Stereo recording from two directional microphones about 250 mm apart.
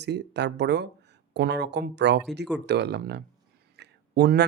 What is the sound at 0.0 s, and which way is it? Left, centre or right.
Speech, right.